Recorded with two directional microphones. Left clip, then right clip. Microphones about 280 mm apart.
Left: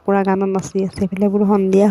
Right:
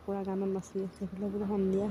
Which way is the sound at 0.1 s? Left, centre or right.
Left.